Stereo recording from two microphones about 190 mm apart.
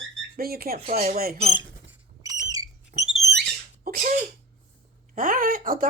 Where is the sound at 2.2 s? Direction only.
20° right (ahead or behind).